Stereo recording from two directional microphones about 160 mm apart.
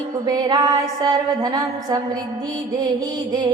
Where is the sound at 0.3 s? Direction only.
25° right (ahead or behind).